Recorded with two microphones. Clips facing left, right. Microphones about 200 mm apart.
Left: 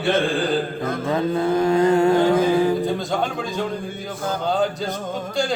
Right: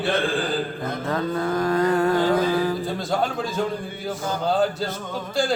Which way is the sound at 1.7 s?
25° left (ahead or behind).